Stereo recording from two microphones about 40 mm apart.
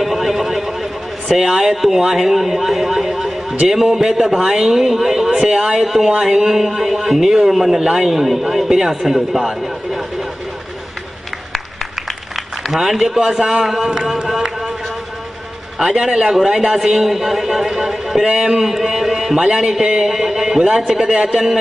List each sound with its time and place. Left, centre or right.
0.0 s neigh: centre
1.3 s a man's voice: centre
12.4 s a sound: centre
15.8 s a man's voice: centre
19.4 s speech: centre
19.8 s a sound: centre
21.0 s speech: centre